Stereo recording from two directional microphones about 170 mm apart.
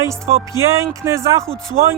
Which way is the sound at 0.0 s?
15° right (ahead or behind).